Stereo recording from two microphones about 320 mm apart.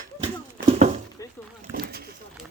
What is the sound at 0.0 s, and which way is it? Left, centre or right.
Horse, right.